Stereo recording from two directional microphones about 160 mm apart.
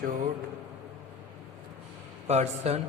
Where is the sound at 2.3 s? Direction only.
45° right (ahead or behind).